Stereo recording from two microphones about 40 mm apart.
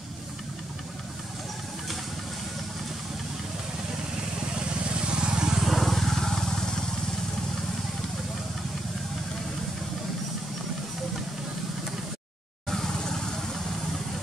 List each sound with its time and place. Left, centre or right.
4.6 s vehicle: right
5.7 s vehicle: centre
12.6 s vehicle: centre